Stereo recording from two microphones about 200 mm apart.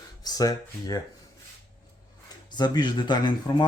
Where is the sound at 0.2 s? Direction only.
20° left (ahead or behind).